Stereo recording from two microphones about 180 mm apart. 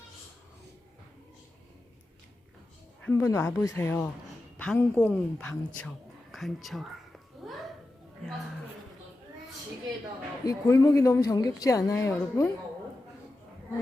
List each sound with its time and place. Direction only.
3.1 s a woman's voice: 10° left (ahead or behind)
7.4 s a sound: centre (ahead or behind)
10.4 s a woman's voice: 20° left (ahead or behind)